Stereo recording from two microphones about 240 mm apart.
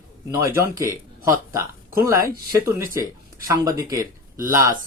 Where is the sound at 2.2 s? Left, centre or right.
Right.